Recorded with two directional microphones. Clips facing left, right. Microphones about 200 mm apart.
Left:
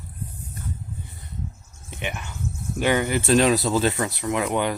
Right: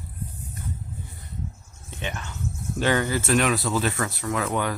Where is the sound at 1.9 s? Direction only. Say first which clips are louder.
Left 1 dB; 15° left (ahead or behind).